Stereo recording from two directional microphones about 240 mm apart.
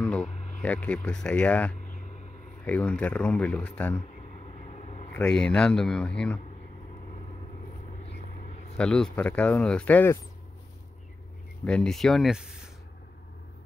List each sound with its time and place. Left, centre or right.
0.0 s speech: centre
4.6 s vehicle: left
5.1 s speech: centre
8.7 s speech: centre
11.6 s speech: centre